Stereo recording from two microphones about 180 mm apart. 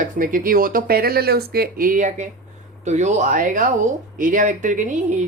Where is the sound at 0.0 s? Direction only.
50° right (ahead or behind).